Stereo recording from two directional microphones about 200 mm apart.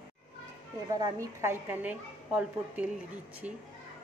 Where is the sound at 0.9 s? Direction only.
15° right (ahead or behind).